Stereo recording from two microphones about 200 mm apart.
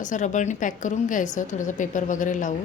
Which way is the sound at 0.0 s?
40° left (ahead or behind).